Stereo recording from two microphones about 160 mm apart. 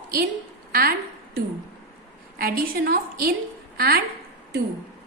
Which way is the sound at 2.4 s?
65° right (ahead or behind).